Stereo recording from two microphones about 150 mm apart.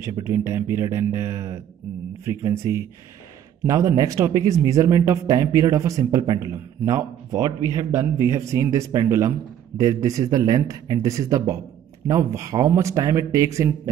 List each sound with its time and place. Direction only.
0.0 s speech: 20° right (ahead or behind)